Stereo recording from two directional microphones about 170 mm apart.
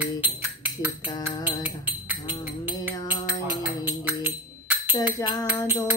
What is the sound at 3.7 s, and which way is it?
Tambourine, 10° right (ahead or behind).